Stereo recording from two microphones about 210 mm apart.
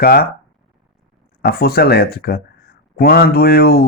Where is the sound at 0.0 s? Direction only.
45° left (ahead or behind).